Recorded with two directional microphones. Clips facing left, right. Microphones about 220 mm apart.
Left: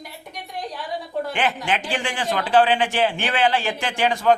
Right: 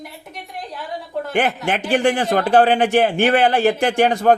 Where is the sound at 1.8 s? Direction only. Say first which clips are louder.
Right 10 dB; 60° right (ahead or behind).